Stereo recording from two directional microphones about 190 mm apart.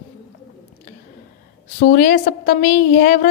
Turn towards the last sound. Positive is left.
turn(degrees=45)  # may be behind; listen again after turning